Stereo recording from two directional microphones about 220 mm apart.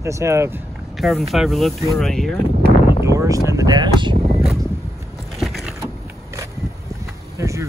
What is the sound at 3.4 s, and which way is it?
Speech, 15° right (ahead or behind).